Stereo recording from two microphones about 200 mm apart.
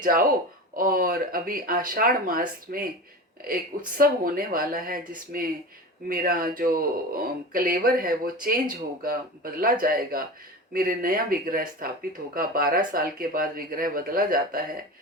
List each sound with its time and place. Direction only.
0.0 s speech: 45° right (ahead or behind)
3.9 s speech: 45° right (ahead or behind)